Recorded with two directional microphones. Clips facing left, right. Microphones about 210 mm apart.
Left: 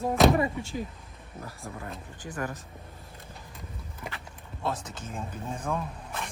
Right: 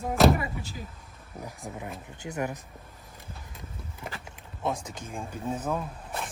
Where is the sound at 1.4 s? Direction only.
15° right (ahead or behind).